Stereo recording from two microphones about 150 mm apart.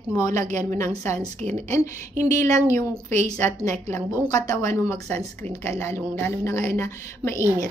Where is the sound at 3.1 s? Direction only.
50° right (ahead or behind).